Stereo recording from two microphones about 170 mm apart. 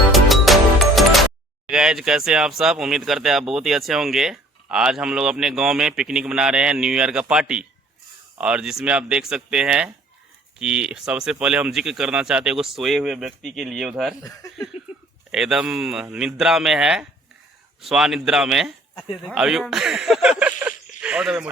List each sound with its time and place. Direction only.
0.1 s music: centre (ahead or behind)
1.6 s speech: 5° right (ahead or behind)
14.2 s speech: 20° left (ahead or behind)
15.3 s a man's voice: 5° right (ahead or behind)
20.4 s a sound: 10° right (ahead or behind)